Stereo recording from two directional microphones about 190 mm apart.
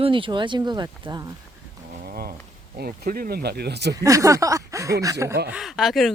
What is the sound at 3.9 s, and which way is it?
Speech, 15° right (ahead or behind).